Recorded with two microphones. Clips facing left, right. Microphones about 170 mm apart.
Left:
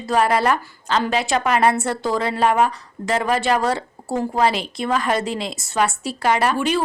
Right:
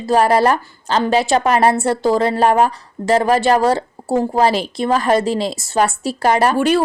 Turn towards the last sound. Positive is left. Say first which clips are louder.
# right 5 dB
turn(degrees=-40)  # may be behind; listen again after turning